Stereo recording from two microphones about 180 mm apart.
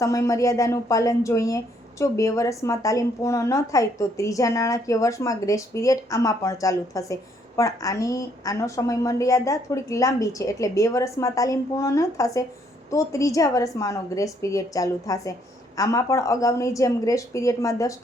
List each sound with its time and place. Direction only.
0.0 s a woman's voice: 20° left (ahead or behind)